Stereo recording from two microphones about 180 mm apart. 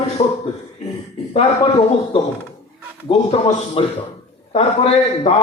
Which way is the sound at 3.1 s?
35° left (ahead or behind).